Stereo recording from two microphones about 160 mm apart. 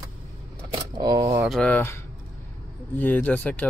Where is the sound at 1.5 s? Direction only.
5° left (ahead or behind).